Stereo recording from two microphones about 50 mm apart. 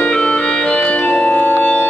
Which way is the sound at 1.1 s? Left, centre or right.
Left.